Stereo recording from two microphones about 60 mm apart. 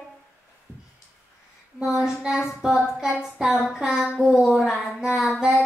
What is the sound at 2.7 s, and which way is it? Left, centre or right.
Speech, centre.